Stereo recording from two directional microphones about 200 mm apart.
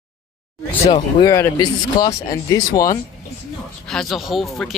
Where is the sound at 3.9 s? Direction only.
Centre (ahead or behind).